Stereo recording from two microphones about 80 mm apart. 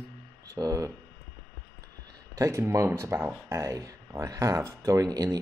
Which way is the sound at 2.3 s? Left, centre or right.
Right.